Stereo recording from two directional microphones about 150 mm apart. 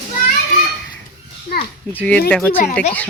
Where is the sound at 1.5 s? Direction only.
90° left.